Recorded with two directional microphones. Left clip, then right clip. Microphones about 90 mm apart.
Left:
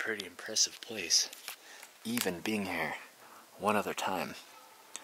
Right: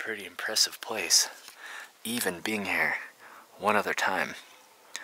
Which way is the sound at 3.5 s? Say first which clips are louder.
Right 5 dB; 25° right (ahead or behind).